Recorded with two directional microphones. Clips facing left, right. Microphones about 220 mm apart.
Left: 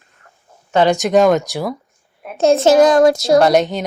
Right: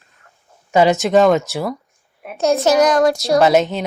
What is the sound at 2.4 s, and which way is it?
Speech, 25° left (ahead or behind).